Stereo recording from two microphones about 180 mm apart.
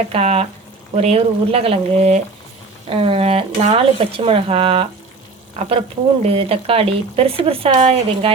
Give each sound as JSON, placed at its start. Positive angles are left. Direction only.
{"t": 0.1, "sound": "speech", "side_deg": -35}